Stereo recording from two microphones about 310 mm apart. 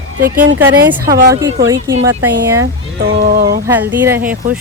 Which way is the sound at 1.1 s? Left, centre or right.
Right.